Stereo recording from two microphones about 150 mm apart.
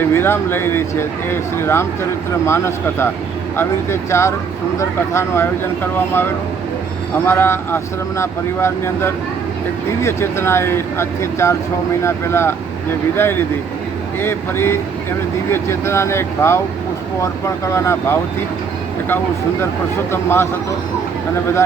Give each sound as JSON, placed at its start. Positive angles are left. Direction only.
{"t": 0.1, "sound": "speech", "side_deg": 15}
{"t": 14.2, "sound": "speech", "side_deg": 15}
{"t": 20.1, "sound": "speech", "side_deg": 15}